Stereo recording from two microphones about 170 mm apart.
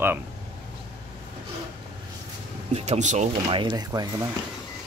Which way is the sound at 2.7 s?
40° right (ahead or behind).